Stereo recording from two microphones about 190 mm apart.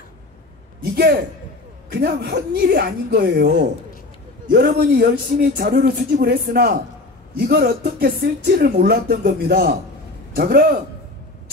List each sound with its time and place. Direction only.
1.9 s a woman's voice: 60° right (ahead or behind)